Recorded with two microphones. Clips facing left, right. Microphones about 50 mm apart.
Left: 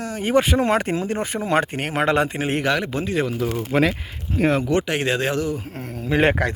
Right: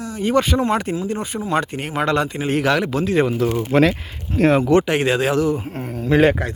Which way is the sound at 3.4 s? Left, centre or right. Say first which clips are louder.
Right 4 dB; right.